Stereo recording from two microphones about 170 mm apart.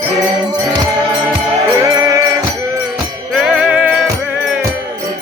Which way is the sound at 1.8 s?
20° right (ahead or behind).